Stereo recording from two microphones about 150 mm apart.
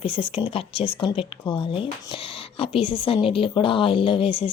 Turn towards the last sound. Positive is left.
turn(degrees=40)  # may be behind; listen again after turning